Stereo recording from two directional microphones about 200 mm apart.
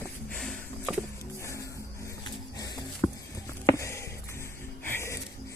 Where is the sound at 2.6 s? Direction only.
20° left (ahead or behind).